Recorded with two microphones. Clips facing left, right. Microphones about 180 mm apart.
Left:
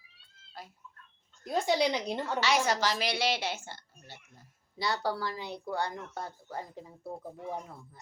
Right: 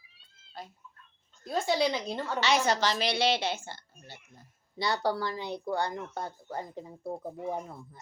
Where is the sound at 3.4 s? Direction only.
10° left (ahead or behind).